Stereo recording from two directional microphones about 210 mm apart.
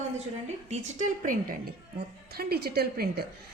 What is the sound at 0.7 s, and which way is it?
A woman's voice, 40° right (ahead or behind).